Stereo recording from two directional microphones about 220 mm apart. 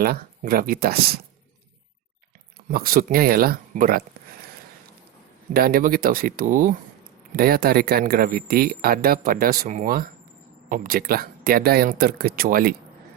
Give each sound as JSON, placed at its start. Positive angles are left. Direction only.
{"t": 0.0, "sound": "speech", "side_deg": -45}
{"t": 2.6, "sound": "speech", "side_deg": -40}
{"t": 5.5, "sound": "speech", "side_deg": -40}